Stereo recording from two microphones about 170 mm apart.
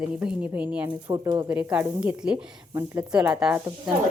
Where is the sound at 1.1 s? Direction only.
25° right (ahead or behind).